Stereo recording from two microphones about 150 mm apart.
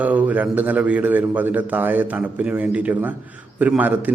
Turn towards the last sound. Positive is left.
turn(degrees=-10)  # may be behind; listen again after turning